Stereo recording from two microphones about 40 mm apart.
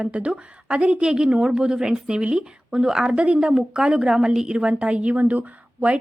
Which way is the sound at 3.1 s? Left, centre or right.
Right.